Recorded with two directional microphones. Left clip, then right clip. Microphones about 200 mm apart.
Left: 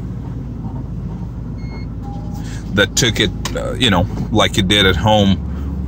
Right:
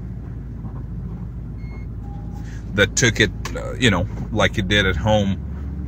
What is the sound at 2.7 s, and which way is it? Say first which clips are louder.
Speech: left 3 dB; 5° left (ahead or behind).